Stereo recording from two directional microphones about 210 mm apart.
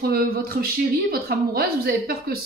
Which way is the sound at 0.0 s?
45° right (ahead or behind).